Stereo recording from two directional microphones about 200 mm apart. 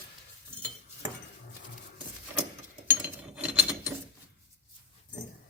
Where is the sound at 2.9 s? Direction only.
10° right (ahead or behind).